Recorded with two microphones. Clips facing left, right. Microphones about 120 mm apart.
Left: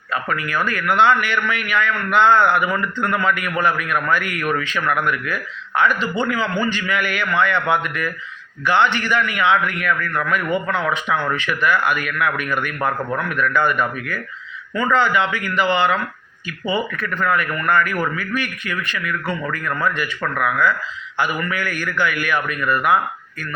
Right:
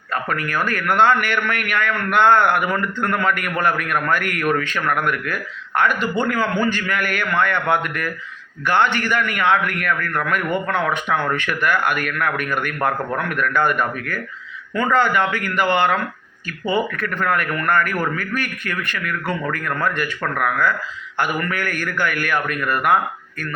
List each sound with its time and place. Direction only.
0.1 s a man's voice: 50° right (ahead or behind)